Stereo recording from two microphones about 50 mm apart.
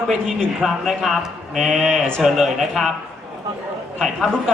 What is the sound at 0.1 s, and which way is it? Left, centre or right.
A man's voice, centre.